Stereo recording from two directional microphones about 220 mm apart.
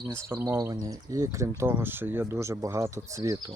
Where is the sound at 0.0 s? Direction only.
15° right (ahead or behind).